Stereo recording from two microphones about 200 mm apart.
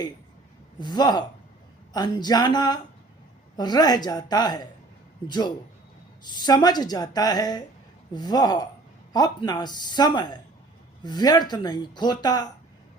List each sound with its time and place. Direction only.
0.8 s speech: 20° left (ahead or behind)